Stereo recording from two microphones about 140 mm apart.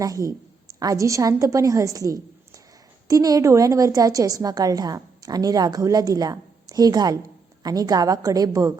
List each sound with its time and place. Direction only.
0.0 s a woman's voice: 25° right (ahead or behind)